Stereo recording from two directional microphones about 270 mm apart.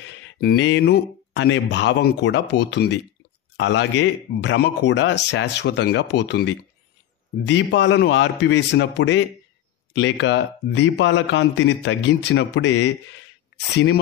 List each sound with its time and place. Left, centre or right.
0.4 s a man's voice: left